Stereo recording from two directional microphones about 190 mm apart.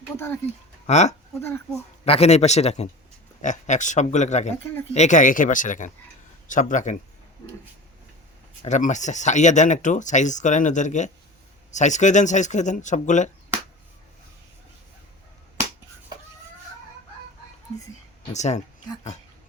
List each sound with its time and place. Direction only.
0.9 s speech: 35° left (ahead or behind)
1.4 s speech: 15° left (ahead or behind)
2.0 s speech: 35° left (ahead or behind)
8.6 s speech: 40° left (ahead or behind)
18.3 s speech: 35° left (ahead or behind)